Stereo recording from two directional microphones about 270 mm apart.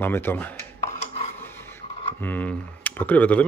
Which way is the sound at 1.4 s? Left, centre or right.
Centre.